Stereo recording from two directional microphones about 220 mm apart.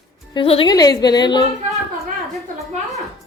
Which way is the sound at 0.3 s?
25° left (ahead or behind).